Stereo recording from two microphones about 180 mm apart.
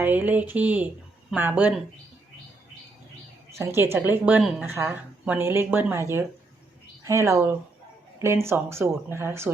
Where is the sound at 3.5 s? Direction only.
15° right (ahead or behind).